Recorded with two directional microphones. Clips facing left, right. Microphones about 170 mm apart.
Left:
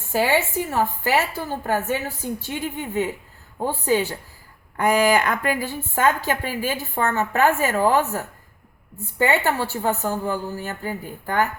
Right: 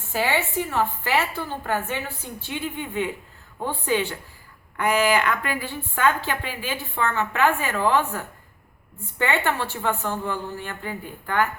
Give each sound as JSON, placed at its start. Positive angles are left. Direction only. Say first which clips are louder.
{"t": 0.3, "sound": "a woman's voice", "louder": "left 3 dB", "side_deg": 45}